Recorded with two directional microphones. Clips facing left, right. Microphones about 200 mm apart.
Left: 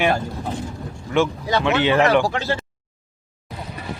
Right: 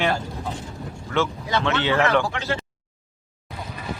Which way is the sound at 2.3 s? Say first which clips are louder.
Left 4 dB; 40° left (ahead or behind).